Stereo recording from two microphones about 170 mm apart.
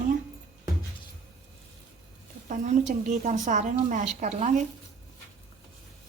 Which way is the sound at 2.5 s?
45° right (ahead or behind).